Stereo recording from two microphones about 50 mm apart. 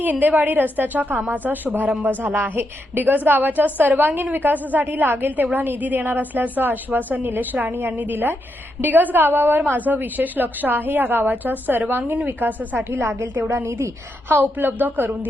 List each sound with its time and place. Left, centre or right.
0.0 s a woman's voice: right
7.7 s a woman's voice: right
13.7 s a woman's voice: right
14.6 s a woman's voice: right